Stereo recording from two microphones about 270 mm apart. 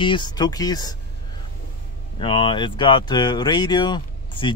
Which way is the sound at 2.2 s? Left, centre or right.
Centre.